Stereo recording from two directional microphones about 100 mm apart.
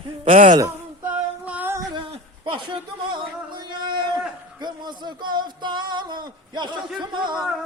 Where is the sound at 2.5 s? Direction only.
55° right (ahead or behind).